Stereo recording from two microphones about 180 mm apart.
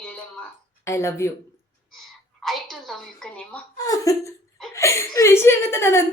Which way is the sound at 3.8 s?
20° left (ahead or behind).